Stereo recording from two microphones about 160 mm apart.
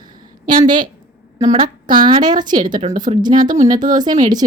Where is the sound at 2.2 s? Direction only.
25° right (ahead or behind).